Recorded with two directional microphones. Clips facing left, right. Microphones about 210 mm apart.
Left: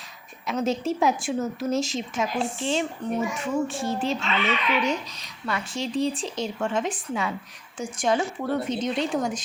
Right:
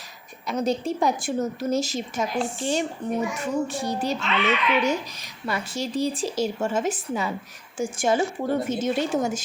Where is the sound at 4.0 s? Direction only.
40° right (ahead or behind).